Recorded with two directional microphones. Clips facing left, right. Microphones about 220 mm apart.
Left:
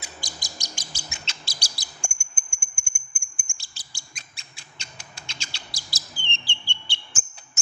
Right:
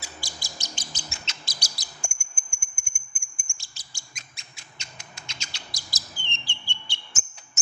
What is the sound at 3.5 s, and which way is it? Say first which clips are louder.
Bird: left 1 dB; 30° left (ahead or behind).